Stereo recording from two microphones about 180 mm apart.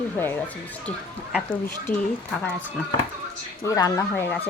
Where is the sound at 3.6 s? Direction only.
20° left (ahead or behind).